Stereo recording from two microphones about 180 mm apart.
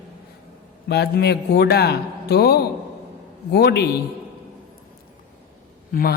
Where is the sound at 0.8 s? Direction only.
65° left (ahead or behind).